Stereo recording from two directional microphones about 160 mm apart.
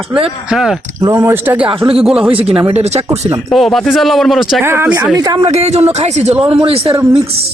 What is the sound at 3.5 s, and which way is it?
Speech, centre (ahead or behind).